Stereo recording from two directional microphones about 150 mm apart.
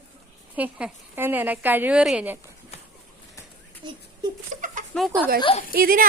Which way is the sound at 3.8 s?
30° right (ahead or behind).